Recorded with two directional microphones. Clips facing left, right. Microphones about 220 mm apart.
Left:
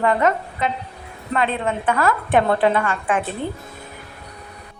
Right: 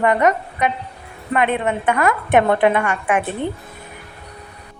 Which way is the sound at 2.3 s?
15° right (ahead or behind).